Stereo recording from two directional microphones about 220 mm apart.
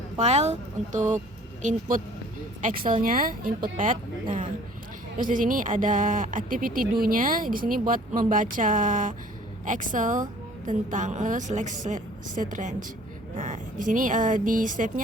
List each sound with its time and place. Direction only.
0.2 s speech: 30° right (ahead or behind)
5.1 s speech: 35° right (ahead or behind)